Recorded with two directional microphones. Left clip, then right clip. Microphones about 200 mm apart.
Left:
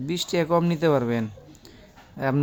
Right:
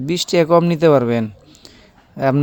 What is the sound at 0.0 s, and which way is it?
Speech, 40° right (ahead or behind).